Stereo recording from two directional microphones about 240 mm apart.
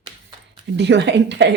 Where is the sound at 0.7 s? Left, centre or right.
Right.